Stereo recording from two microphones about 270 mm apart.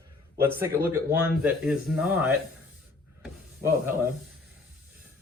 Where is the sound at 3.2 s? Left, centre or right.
Centre.